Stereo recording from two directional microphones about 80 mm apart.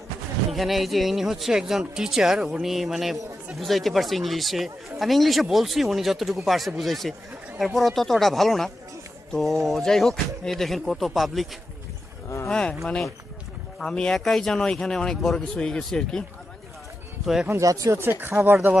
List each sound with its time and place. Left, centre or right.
0.5 s speech: centre
12.4 s speech: centre
17.5 s speech: right
18.2 s speech: right